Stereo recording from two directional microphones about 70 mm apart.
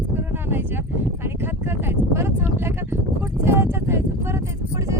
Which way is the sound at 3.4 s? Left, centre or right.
Right.